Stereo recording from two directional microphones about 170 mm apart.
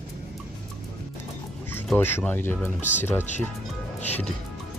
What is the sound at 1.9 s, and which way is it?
Speech, 10° left (ahead or behind).